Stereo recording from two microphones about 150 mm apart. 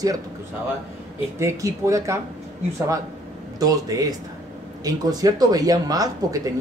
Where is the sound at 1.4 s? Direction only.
20° right (ahead or behind).